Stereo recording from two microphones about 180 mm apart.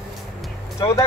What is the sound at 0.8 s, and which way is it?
Speech, 25° left (ahead or behind).